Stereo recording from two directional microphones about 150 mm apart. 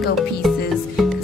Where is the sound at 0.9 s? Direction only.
Centre (ahead or behind).